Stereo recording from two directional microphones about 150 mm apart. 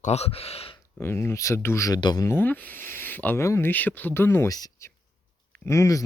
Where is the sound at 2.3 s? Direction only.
15° left (ahead or behind).